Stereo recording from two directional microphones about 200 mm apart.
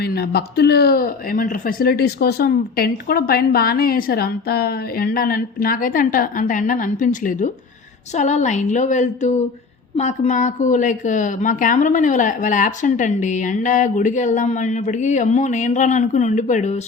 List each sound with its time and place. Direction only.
0.0 s speech: 50° left (ahead or behind); by 16.8 s 35° left (ahead or behind)